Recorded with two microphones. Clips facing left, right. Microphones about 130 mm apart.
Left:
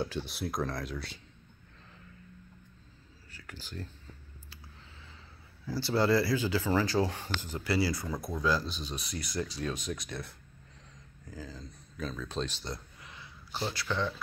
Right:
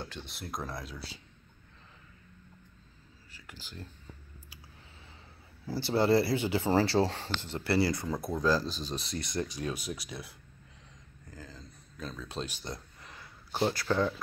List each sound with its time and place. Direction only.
0.0 s speech: 5° left (ahead or behind)
5.8 s speech: 20° right (ahead or behind)
7.7 s speech: 55° right (ahead or behind)
8.0 s speech: 25° right (ahead or behind)
8.4 s speech: 40° right (ahead or behind); by 12.8 s 15° right (ahead or behind)
13.0 s a sound: 45° right (ahead or behind)